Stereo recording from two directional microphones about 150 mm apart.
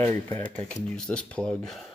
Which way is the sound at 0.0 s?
10° left (ahead or behind).